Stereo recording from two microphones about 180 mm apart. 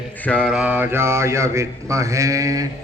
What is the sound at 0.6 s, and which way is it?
Mantra, 10° right (ahead or behind).